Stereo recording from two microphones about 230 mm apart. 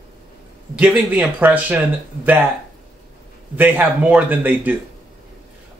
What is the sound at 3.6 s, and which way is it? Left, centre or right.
Speech, centre.